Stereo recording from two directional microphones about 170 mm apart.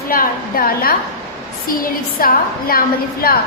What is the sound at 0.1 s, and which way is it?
A woman's voice, 60° left (ahead or behind).